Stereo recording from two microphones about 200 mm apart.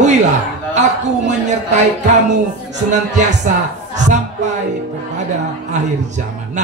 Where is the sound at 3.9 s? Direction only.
35° right (ahead or behind).